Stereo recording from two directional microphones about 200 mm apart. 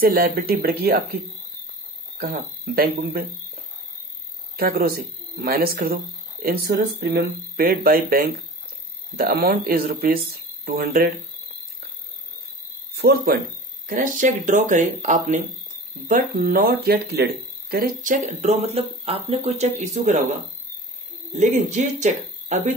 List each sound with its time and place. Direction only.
0.0 s speech: 45° right (ahead or behind)
2.3 s speech: 50° right (ahead or behind)
4.6 s speech: 50° right (ahead or behind)
12.9 s speech: 50° right (ahead or behind); by 20.2 s 35° right (ahead or behind)
21.3 s speech: 35° right (ahead or behind)